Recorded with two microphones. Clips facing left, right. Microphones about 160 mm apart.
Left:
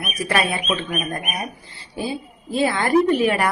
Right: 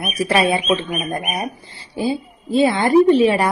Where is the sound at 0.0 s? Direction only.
25° right (ahead or behind).